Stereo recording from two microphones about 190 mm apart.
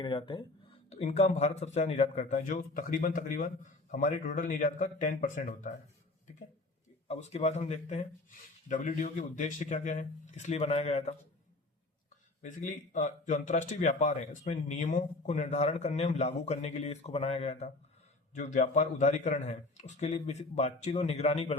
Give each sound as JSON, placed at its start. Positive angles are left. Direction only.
{"t": 0.0, "sound": "speech", "side_deg": 25}
{"t": 7.1, "sound": "speech", "side_deg": 35}
{"t": 12.4, "sound": "speech", "side_deg": 40}